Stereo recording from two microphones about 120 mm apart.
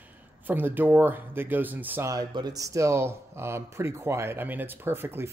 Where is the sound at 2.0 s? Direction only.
35° right (ahead or behind).